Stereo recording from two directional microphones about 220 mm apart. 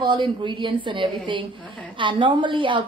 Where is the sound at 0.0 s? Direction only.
20° right (ahead or behind).